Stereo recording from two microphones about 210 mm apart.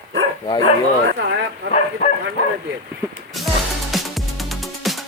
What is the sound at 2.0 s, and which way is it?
Bow-wow, 30° left (ahead or behind).